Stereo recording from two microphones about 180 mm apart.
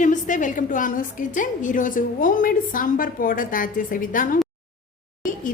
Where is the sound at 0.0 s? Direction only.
45° left (ahead or behind).